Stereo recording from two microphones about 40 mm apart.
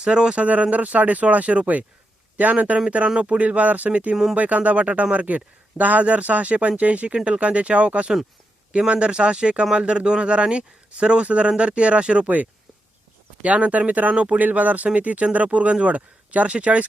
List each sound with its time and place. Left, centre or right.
0.0 s speech: right
0.4 s speech: right
13.4 s speech: right